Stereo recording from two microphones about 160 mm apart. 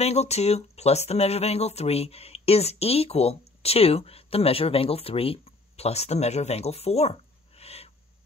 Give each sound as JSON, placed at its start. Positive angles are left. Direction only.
{"t": 0.0, "sound": "speech", "side_deg": 40}